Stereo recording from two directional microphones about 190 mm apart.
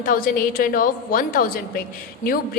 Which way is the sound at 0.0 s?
45° left (ahead or behind).